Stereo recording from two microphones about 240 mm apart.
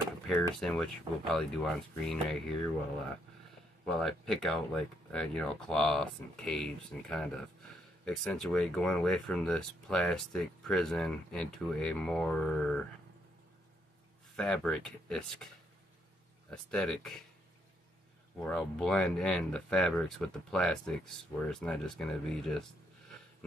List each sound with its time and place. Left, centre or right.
0.3 s speech: centre
4.0 s speech: centre
14.3 s speech: centre
18.4 s speech: centre